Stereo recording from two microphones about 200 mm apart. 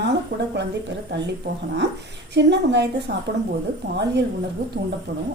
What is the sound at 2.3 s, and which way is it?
Speech, 60° right (ahead or behind).